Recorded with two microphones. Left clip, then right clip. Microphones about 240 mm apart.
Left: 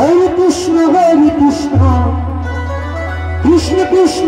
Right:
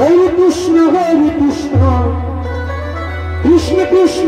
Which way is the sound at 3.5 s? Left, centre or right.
Left.